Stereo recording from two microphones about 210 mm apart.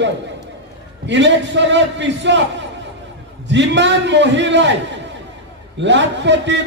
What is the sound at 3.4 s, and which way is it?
Speech, 60° right (ahead or behind).